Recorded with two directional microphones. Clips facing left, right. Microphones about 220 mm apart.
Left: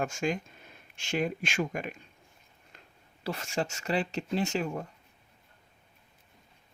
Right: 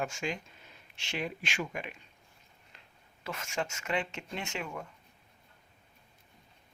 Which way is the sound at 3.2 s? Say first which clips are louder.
Left 4 dB; 35° left (ahead or behind).